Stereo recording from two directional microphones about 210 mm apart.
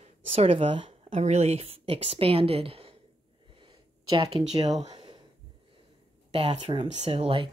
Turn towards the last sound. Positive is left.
turn(degrees=-25)  # may be behind; listen again after turning